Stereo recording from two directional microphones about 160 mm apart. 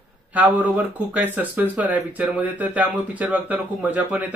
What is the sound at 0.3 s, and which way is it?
Speech, 10° right (ahead or behind).